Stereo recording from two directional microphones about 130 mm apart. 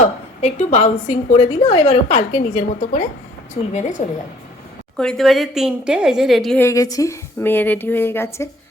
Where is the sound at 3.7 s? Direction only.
70° left (ahead or behind).